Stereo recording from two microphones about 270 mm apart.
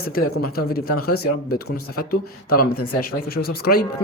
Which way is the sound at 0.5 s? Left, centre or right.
Left.